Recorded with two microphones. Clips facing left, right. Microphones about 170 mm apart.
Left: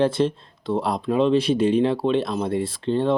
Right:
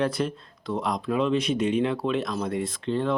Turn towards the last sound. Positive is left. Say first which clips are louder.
# left 5 dB
turn(degrees=30)  # may be behind; listen again after turning